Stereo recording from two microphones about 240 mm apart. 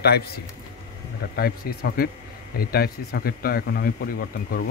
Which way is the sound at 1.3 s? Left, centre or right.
Left.